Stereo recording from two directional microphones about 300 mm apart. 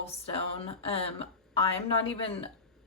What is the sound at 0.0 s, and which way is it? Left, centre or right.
Speech, centre.